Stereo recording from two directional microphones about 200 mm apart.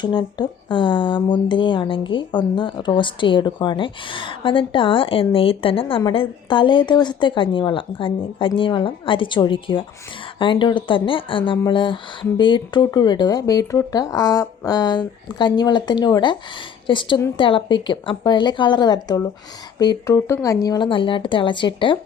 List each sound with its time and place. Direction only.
0.0 s speech: 20° left (ahead or behind)